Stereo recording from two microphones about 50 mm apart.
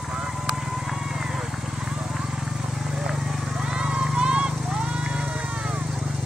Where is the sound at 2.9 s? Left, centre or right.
Centre.